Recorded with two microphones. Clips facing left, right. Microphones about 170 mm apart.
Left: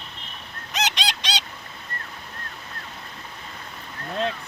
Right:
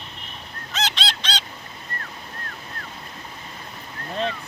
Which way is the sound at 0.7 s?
15° left (ahead or behind).